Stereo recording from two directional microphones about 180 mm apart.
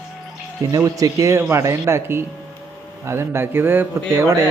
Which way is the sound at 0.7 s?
20° right (ahead or behind).